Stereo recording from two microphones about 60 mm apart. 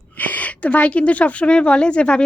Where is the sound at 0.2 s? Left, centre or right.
Left.